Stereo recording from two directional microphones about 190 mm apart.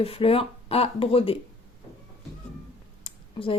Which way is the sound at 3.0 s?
30° left (ahead or behind).